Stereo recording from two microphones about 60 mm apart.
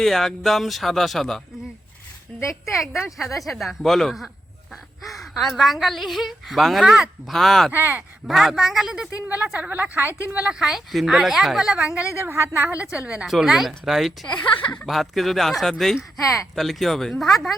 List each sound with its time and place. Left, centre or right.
0.0 s speech: centre
2.3 s speech: centre
2.7 s speech: centre
7.7 s speech: right
8.3 s speech: centre
9.3 s a woman's voice: right
10.5 s speech: centre
12.2 s a woman's voice: right
12.5 s speech: right
13.2 s speech: centre